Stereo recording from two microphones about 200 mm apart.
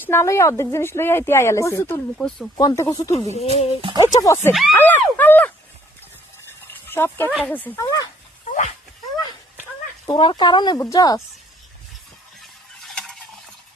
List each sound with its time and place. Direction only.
0.0 s speech: 10° left (ahead or behind)
2.6 s speech: 15° left (ahead or behind)
3.3 s speech: 30° left (ahead or behind)
3.9 s speech: 20° left (ahead or behind)
6.8 s speech: 10° left (ahead or behind)
7.3 s speech: 5° right (ahead or behind)
7.5 s speech: 10° left (ahead or behind)
8.4 s dog: 40° left (ahead or behind)
10.2 s speech: 25° left (ahead or behind)
12.4 s stir: centre (ahead or behind)